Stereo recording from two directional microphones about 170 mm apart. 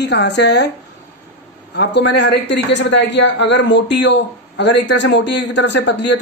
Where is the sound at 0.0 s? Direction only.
85° left.